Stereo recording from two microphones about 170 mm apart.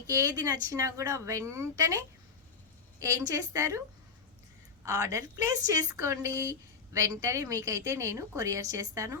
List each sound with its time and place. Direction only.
0.1 s a woman's voice: 20° right (ahead or behind)
3.0 s a woman's voice: 20° right (ahead or behind)